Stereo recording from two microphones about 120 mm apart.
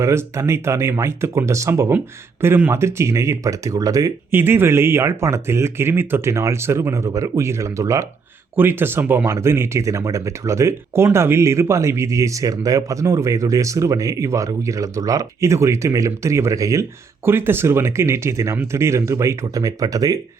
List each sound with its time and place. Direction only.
0.0 s speech: 25° right (ahead or behind)
4.3 s speech: 20° right (ahead or behind)